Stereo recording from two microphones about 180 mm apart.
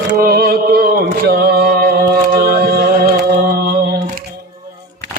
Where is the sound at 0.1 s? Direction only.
55° right (ahead or behind).